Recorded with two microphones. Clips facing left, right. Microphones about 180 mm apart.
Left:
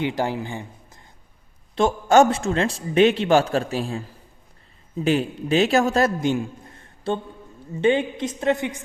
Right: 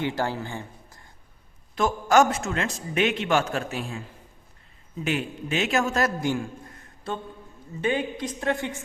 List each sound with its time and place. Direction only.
0.0 s a man's voice: 15° left (ahead or behind)